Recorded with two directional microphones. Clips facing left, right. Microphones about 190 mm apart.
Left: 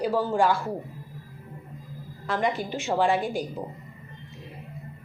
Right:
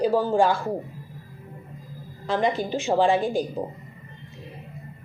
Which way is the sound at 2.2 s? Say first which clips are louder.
Right 3 dB; 25° right (ahead or behind).